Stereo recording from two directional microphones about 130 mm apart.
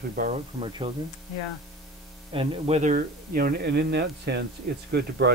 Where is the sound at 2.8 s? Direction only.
70° right (ahead or behind).